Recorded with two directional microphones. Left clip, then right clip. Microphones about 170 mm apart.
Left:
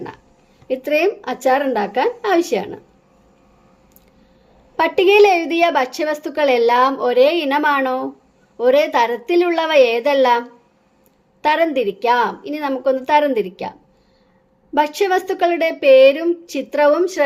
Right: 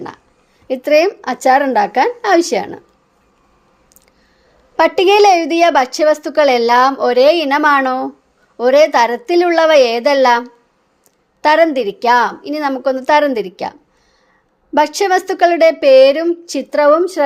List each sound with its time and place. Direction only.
0.7 s a woman's voice: 20° right (ahead or behind)
4.8 s a woman's voice: 20° right (ahead or behind)
11.4 s a woman's voice: 20° right (ahead or behind)